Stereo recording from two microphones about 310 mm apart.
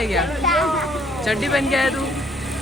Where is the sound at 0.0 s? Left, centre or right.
Centre.